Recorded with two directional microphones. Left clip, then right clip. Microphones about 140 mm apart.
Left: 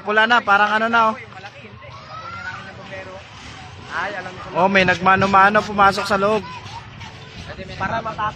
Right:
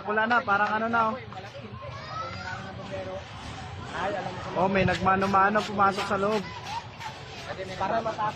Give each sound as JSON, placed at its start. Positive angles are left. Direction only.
{"t": 0.1, "sound": "a man's voice", "side_deg": 75}
{"t": 2.2, "sound": "a sound", "side_deg": 0}
{"t": 3.9, "sound": "speech", "side_deg": 0}
{"t": 4.6, "sound": "a man's voice", "side_deg": 55}
{"t": 7.7, "sound": "speech", "side_deg": 0}